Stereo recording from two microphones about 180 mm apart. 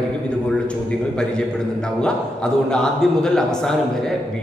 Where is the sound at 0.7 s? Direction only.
5° left (ahead or behind).